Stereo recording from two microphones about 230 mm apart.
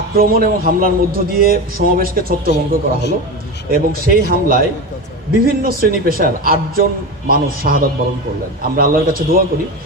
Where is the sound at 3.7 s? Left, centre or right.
Right.